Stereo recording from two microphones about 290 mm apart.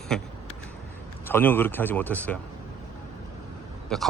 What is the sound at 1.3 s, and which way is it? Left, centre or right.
Speech, centre.